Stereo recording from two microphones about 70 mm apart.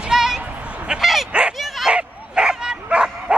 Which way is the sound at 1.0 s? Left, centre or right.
Centre.